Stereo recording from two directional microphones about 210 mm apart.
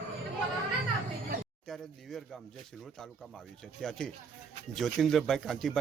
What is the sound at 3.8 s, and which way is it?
Speech, 5° left (ahead or behind).